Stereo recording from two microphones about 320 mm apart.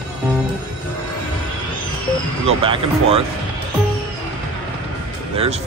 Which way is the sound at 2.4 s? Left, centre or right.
Centre.